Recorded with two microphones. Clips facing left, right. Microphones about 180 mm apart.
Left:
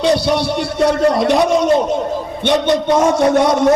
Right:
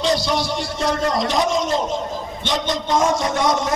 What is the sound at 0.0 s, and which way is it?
A man's voice, 60° left (ahead or behind).